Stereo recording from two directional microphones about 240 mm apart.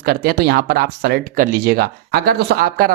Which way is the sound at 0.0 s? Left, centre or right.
Right.